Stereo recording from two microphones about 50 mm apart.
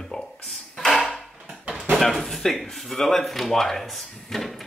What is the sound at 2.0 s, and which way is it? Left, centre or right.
Speech, centre.